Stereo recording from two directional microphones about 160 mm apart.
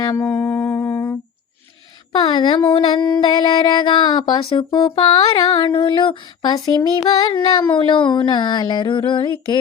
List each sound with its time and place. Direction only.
0.0 s music: 25° left (ahead or behind)
0.3 s humming: 15° left (ahead or behind)
2.1 s a sound: 30° left (ahead or behind)